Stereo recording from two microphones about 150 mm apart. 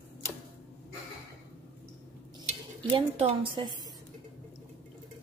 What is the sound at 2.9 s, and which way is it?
Speech, 40° right (ahead or behind).